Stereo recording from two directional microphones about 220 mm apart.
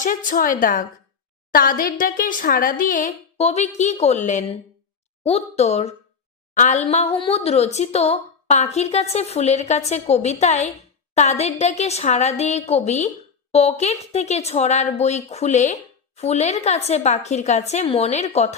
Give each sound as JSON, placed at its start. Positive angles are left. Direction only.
{"t": 0.0, "sound": "a woman's voice", "side_deg": 35}